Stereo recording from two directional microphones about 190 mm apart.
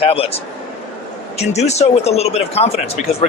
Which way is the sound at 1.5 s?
35° left (ahead or behind).